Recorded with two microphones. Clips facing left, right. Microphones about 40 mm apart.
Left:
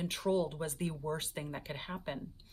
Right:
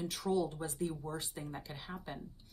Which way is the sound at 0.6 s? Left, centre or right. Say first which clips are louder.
Left 1 dB; left.